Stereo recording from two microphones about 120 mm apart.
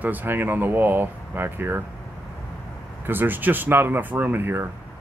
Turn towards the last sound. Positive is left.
turn(degrees=-20)  # may be behind; listen again after turning